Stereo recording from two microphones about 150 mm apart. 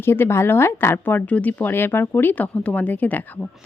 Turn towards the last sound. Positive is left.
turn(degrees=10)  # may be behind; listen again after turning